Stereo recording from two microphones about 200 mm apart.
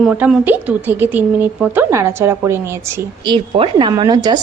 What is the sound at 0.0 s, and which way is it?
Speech, 5° right (ahead or behind).